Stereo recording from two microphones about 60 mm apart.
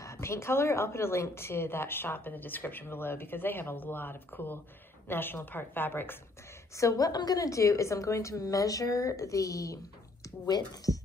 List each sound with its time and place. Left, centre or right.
0.0 s a woman's voice: left
6.8 s a woman's voice: left